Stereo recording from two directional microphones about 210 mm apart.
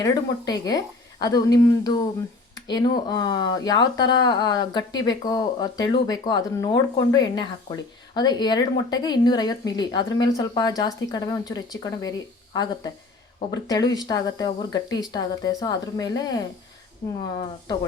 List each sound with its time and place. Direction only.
0.0 s a woman's voice: 20° left (ahead or behind)